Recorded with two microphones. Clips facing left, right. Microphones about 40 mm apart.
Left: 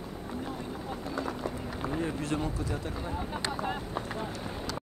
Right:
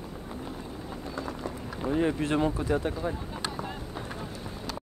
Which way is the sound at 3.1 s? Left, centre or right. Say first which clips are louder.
Left 2 dB; left.